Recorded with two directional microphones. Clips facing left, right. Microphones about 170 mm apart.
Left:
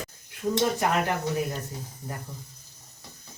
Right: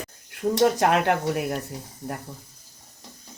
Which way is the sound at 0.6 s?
75° right (ahead or behind).